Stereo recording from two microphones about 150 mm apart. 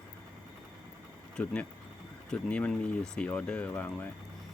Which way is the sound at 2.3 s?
5° left (ahead or behind).